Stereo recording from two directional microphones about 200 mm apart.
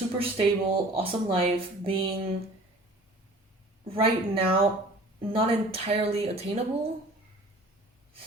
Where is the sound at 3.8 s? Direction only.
30° right (ahead or behind).